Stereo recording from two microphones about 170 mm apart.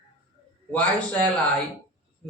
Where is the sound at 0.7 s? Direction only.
10° left (ahead or behind).